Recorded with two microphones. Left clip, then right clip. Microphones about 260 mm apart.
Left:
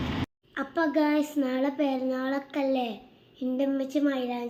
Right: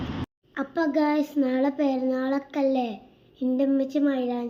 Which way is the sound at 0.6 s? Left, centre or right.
Right.